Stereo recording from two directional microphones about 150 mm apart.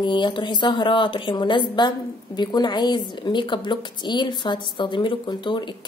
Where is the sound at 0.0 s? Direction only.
30° left (ahead or behind).